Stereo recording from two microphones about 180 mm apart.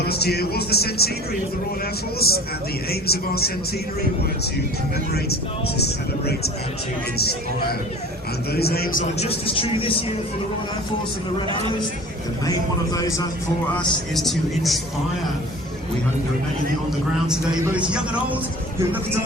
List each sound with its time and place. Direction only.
0.1 s speech: 60° left (ahead or behind)
2.2 s speech: 60° left (ahead or behind)
5.1 s speech: 60° left (ahead or behind)
8.5 s speech: 60° left (ahead or behind)
9.1 s speech: 30° left (ahead or behind)
12.9 s a man's voice: 20° left (ahead or behind)
14.2 s speech: centre (ahead or behind)
17.7 s speech: 5° right (ahead or behind)